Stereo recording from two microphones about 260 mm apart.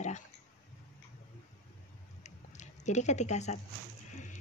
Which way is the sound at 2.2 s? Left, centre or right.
Left.